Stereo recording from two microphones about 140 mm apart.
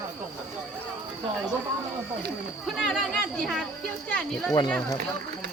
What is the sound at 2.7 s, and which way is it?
Speech, centre (ahead or behind).